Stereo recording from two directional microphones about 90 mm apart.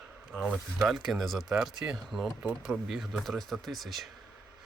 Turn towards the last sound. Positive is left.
turn(degrees=0)  # may be behind; listen again after turning